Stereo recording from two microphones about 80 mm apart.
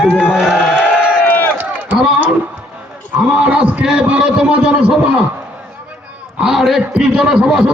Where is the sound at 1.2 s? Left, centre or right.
Left.